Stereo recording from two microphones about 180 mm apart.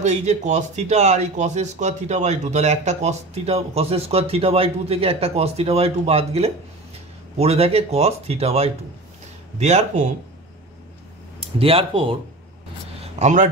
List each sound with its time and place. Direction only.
0.0 s speech: 40° right (ahead or behind)
11.3 s speech: 30° right (ahead or behind)
13.0 s a sound: 40° right (ahead or behind)